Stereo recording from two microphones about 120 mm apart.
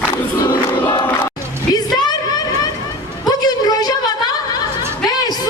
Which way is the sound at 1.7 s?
35° left (ahead or behind).